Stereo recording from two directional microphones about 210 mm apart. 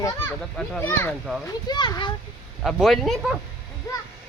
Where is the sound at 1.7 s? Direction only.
20° left (ahead or behind).